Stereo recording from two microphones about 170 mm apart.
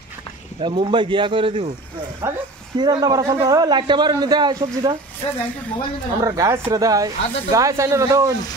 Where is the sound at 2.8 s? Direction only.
25° right (ahead or behind).